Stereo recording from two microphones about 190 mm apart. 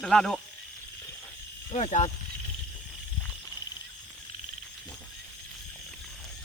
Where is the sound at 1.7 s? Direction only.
35° left (ahead or behind).